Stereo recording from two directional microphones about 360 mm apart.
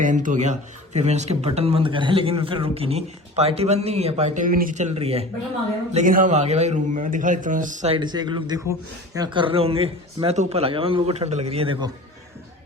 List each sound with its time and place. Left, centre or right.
0.0 s a man's voice: right